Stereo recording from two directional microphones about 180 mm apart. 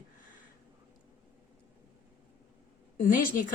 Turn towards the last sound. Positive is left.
turn(degrees=50)  # may be behind; listen again after turning